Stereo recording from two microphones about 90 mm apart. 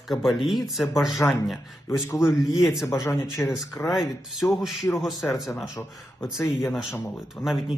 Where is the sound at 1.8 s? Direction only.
30° left (ahead or behind).